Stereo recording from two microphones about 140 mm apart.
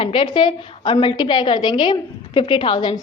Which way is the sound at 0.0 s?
40° left (ahead or behind).